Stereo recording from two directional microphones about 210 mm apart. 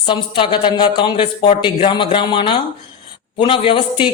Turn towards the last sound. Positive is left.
turn(degrees=25)  # may be behind; listen again after turning